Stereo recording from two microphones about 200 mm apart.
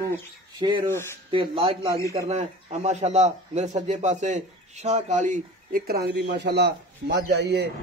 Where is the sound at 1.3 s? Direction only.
25° right (ahead or behind).